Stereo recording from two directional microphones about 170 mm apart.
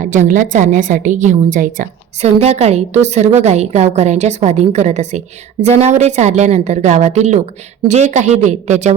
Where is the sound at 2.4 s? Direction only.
40° right (ahead or behind).